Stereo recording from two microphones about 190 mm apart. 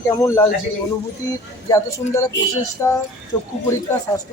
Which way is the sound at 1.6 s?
15° left (ahead or behind).